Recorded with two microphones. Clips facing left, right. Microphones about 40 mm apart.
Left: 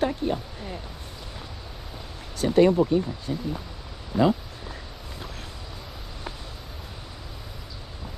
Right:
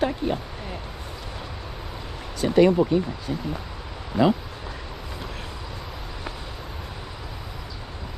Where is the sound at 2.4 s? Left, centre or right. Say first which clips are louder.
Right 1 dB; right.